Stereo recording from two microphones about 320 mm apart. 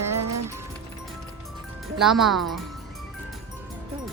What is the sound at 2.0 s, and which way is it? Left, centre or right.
Speech, centre.